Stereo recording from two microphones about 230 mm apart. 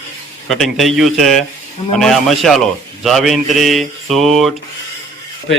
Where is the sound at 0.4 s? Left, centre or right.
Centre.